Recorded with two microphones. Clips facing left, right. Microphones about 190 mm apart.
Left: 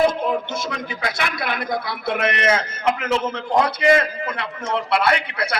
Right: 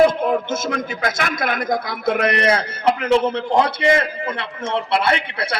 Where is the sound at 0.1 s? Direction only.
50° right (ahead or behind).